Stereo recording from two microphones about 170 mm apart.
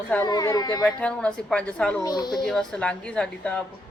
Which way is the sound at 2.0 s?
25° left (ahead or behind).